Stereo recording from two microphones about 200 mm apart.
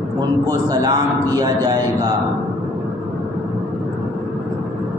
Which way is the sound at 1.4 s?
20° right (ahead or behind).